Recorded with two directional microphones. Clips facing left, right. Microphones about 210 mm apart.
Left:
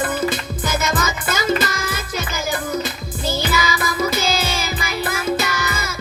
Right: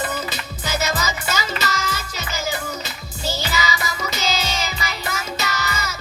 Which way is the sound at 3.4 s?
55° left (ahead or behind).